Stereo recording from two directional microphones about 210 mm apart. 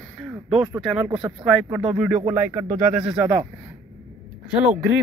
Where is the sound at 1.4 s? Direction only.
Centre (ahead or behind).